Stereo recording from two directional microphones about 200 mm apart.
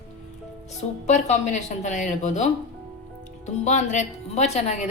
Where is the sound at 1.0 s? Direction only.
35° left (ahead or behind).